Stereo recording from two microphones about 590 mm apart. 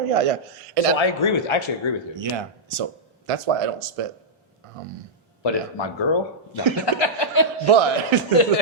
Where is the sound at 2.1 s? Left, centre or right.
Right.